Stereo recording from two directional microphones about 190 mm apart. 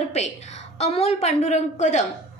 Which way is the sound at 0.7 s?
35° left (ahead or behind).